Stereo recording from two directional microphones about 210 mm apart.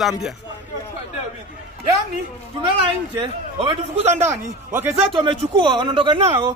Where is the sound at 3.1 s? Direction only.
25° right (ahead or behind).